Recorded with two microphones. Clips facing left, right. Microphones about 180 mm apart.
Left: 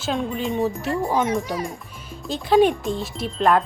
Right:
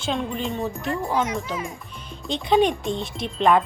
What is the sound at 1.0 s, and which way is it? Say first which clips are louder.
Speech: left 2 dB; 20° left (ahead or behind).